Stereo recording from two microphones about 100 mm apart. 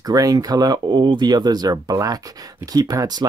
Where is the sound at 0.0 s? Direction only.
40° right (ahead or behind).